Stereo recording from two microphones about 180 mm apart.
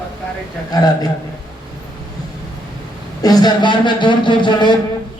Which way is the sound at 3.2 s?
20° left (ahead or behind).